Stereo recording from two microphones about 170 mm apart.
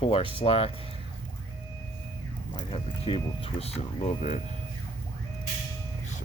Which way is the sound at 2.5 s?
30° left (ahead or behind).